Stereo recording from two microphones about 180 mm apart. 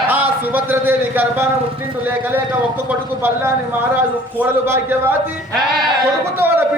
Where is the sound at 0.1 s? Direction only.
10° right (ahead or behind).